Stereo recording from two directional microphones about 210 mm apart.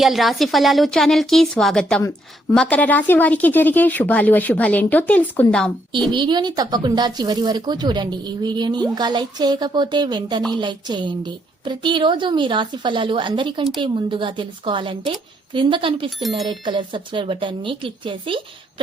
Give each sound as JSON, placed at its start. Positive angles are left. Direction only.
{"t": 0.0, "sound": "a woman's voice", "side_deg": 0}
{"t": 6.1, "sound": "a woman's voice", "side_deg": -20}
{"t": 16.2, "sound": "speech", "side_deg": 0}
{"t": 16.5, "sound": "a woman's voice", "side_deg": -20}